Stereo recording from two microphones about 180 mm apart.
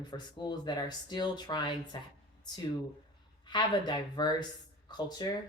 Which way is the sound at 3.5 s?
25° left (ahead or behind).